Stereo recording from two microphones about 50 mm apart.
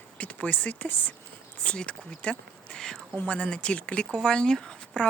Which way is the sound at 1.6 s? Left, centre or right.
Left.